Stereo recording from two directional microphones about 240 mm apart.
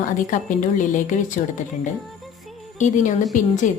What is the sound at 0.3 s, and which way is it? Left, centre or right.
A woman's voice, left.